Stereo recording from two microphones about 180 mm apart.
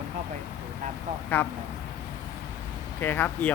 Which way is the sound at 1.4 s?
10° left (ahead or behind).